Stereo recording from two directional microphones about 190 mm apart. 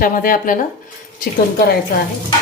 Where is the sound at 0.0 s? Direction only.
50° left (ahead or behind).